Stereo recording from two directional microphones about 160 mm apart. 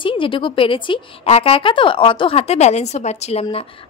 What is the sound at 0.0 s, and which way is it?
A woman's voice, 30° left (ahead or behind).